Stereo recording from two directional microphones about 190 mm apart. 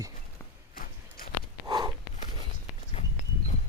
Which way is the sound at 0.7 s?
50° left (ahead or behind).